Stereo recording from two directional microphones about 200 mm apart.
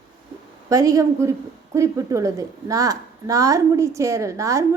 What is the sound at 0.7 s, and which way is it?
A woman's voice, 15° right (ahead or behind).